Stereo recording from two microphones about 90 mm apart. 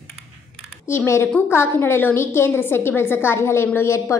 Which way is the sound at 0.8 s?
30° left (ahead or behind).